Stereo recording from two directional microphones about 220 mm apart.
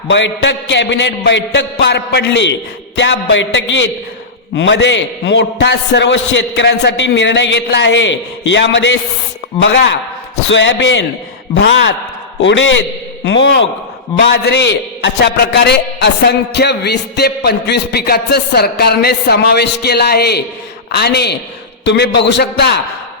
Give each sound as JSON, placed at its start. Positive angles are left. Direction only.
{"t": 0.1, "sound": "a man's voice", "side_deg": 55}
{"t": 12.4, "sound": "a man's voice", "side_deg": 55}